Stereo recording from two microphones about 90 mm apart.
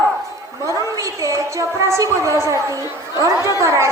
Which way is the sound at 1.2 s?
35° right (ahead or behind).